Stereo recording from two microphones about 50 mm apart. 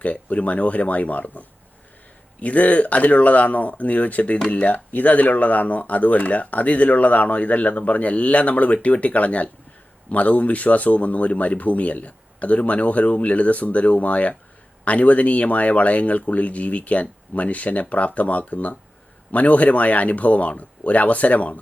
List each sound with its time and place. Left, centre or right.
0.0 s speech: left
4.4 s speech: centre
4.6 s speech: left